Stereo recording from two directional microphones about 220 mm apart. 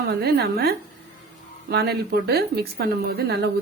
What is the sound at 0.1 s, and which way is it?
Speech, 45° right (ahead or behind).